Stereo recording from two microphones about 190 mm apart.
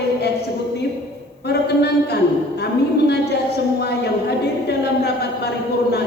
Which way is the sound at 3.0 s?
60° left (ahead or behind).